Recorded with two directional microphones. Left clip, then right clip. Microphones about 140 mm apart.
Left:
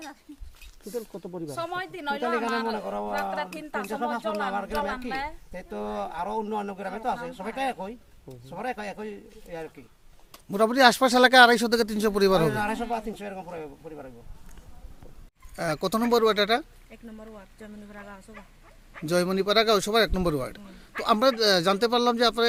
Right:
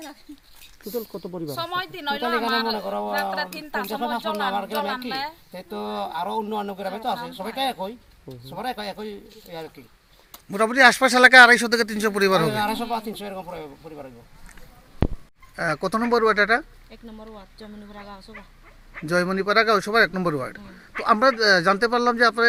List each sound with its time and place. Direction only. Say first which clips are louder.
0.9 s speech: right 4 dB; 80° right
1.5 s a woman's voice: right 4 dB; 30° left (ahead or behind)
3.8 s a man's voice: right 2 dB; centre (ahead or behind)
4.2 s a woman's voice: right 4 dB; 30° left (ahead or behind)
5.5 s a man's voice: right 3 dB; 5° right (ahead or behind)
7.1 s a woman's voice: right 1 dB; 35° left (ahead or behind)
7.3 s a man's voice: right 4 dB; 5° right (ahead or behind)
10.5 s speech: right 3 dB; 30° left (ahead or behind)
12.5 s a man's voice: right 3 dB; centre (ahead or behind)
15.5 s speech: right 3 dB; 20° left (ahead or behind)
17.2 s speech: right 4 dB; 5° left (ahead or behind)
19.0 s speech: right 2 dB; 20° left (ahead or behind)